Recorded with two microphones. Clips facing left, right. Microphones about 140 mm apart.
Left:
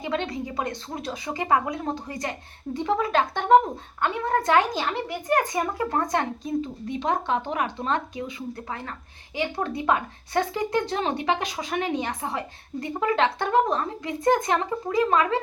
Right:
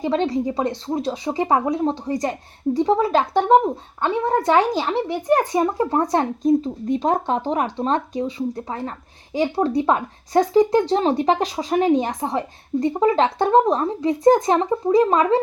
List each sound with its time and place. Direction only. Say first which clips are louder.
0.0 s a child's voice: right 8 dB; 35° right (ahead or behind)